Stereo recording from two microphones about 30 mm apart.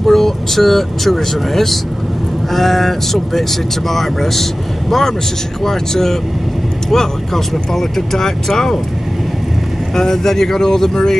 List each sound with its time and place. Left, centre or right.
0.0 s speech: centre
9.9 s speech: centre